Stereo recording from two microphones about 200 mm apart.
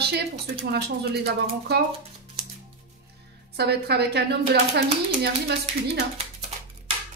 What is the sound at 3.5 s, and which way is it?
Speech, 55° right (ahead or behind).